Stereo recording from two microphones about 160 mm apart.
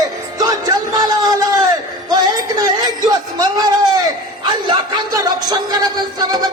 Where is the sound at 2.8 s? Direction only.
25° right (ahead or behind).